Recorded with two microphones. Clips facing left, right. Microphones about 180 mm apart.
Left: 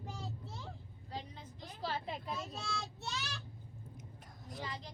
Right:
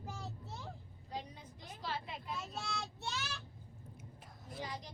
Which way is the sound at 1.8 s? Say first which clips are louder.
Left 3 dB; 35° left (ahead or behind).